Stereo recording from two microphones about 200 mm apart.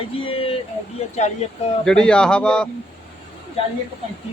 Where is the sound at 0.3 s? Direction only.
30° left (ahead or behind).